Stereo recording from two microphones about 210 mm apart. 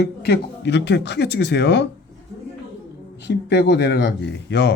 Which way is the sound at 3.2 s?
55° left (ahead or behind).